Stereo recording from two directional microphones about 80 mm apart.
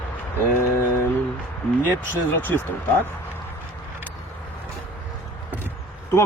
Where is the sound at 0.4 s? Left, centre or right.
Left.